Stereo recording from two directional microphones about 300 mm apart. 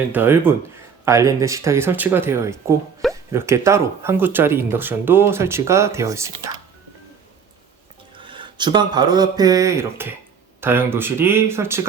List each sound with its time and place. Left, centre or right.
0.1 s speech: centre
8.2 s speech: centre